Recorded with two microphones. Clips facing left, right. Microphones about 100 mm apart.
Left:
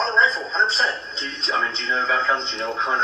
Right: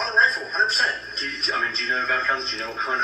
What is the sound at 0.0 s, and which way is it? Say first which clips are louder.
A man's voice: left 2 dB; 50° left (ahead or behind).